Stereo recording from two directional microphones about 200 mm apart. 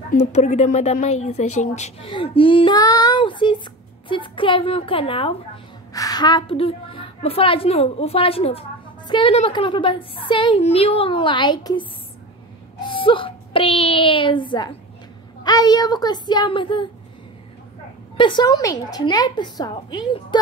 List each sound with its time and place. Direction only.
0.3 s a woman's voice: 35° left (ahead or behind)
12.8 s a woman's voice: 25° left (ahead or behind)
18.1 s a woman's voice: 25° left (ahead or behind)